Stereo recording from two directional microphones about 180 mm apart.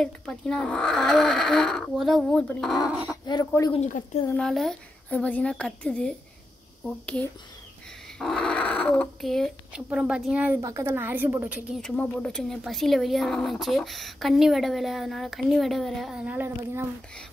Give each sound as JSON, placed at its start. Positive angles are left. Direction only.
{"t": 0.0, "sound": "speech", "side_deg": 5}
{"t": 3.1, "sound": "speech", "side_deg": 20}
{"t": 4.4, "sound": "speech", "side_deg": 0}
{"t": 8.2, "sound": "a woman's voice", "side_deg": 5}
{"t": 11.8, "sound": "speech", "side_deg": 5}